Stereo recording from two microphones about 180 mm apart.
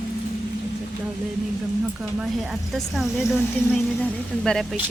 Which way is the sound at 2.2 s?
Centre (ahead or behind).